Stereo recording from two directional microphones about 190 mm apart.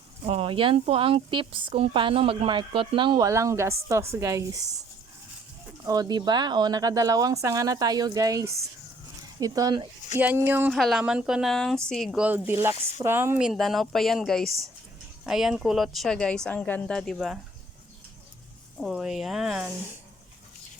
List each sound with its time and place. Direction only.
0.3 s a woman's voice: 30° right (ahead or behind)
5.8 s a woman's voice: 20° right (ahead or behind); by 17.4 s 5° right (ahead or behind)
18.8 s a woman's voice: 5° right (ahead or behind)